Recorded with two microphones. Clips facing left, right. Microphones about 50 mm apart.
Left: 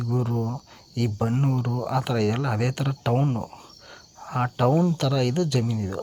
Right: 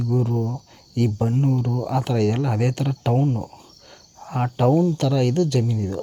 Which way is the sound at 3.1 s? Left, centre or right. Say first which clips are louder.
Right 2 dB; left.